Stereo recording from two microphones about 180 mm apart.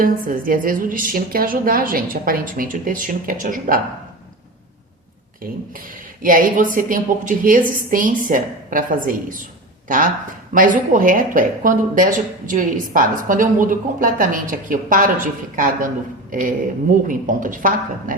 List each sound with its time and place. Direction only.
0.0 s speech: 50° right (ahead or behind)
5.4 s speech: 50° right (ahead or behind)
10.5 s speech: 50° right (ahead or behind)